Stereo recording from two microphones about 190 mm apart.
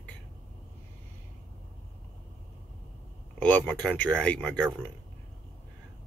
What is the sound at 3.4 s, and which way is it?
Speech, 10° left (ahead or behind).